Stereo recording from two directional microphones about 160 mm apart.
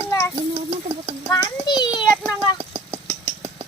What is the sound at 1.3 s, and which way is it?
Speech, 25° left (ahead or behind).